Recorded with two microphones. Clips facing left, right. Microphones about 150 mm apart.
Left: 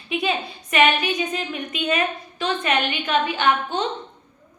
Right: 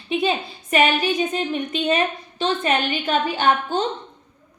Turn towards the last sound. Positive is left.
turn(degrees=-35)  # may be behind; listen again after turning